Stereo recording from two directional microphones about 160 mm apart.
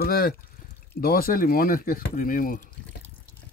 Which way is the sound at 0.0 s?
70° left (ahead or behind).